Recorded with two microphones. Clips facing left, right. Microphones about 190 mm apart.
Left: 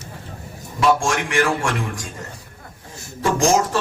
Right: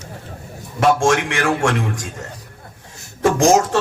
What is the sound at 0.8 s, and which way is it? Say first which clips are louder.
Speech: right 3 dB; 70° right (ahead or behind).